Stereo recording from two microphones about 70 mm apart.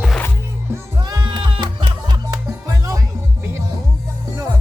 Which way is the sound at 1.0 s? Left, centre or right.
Right.